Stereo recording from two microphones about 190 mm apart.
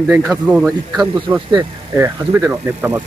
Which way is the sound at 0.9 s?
25° right (ahead or behind).